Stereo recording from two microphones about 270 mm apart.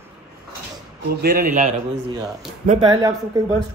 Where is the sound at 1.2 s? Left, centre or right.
Right.